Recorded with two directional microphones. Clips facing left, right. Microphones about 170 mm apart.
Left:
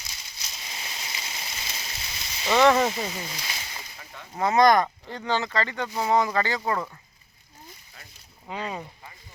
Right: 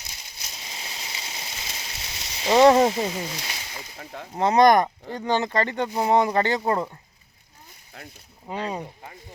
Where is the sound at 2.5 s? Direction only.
25° right (ahead or behind).